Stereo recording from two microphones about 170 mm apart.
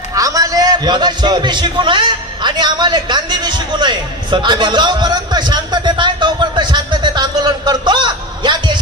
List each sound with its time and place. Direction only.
0.1 s a man's voice: 20° right (ahead or behind)